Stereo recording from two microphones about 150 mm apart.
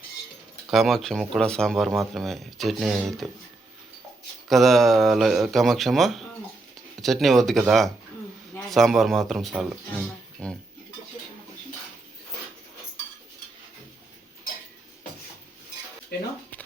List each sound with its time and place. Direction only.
0.7 s speech: centre (ahead or behind)
4.4 s speech: centre (ahead or behind)
16.1 s a sound: 90° left